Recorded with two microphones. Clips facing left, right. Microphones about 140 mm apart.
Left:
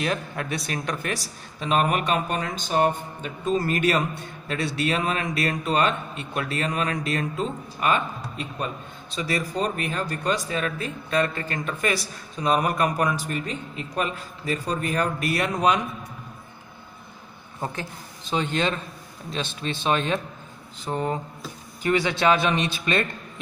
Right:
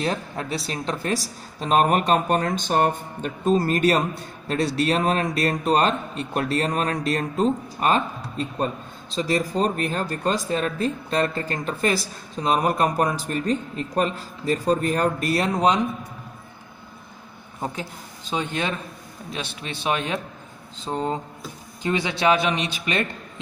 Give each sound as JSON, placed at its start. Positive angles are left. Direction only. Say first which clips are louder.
{"t": 0.0, "sound": "a man's voice", "louder": "right 1 dB", "side_deg": -30}
{"t": 18.3, "sound": "a man's voice", "louder": "left 1 dB", "side_deg": -15}